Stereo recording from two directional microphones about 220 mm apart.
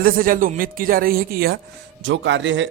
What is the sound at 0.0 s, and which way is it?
Speech, 40° right (ahead or behind).